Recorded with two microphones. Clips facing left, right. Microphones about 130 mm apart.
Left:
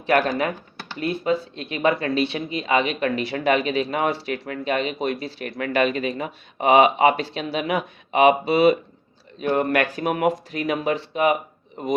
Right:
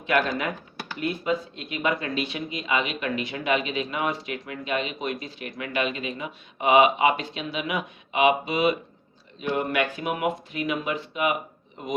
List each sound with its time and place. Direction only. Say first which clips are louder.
0.3 s speech: left 5 dB; 35° left (ahead or behind)
9.4 s speech: left 5 dB; 55° left (ahead or behind)
9.9 s speech: left 5 dB; 40° left (ahead or behind)